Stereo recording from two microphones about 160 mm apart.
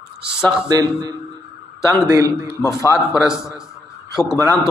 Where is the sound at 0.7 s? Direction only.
25° right (ahead or behind).